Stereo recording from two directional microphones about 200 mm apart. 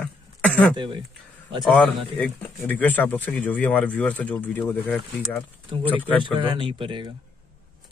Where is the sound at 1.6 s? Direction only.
5° left (ahead or behind).